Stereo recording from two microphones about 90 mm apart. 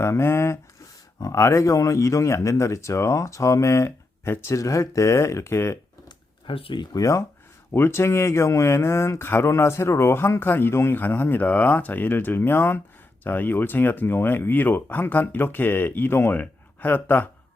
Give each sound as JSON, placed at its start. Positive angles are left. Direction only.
{"t": 0.0, "sound": "speech", "side_deg": 30}
{"t": 6.5, "sound": "speech", "side_deg": 85}
{"t": 6.9, "sound": "speech", "side_deg": 40}